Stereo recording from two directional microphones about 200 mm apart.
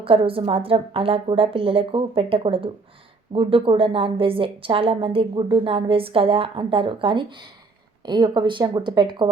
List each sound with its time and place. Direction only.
0.0 s a woman's voice: 25° right (ahead or behind)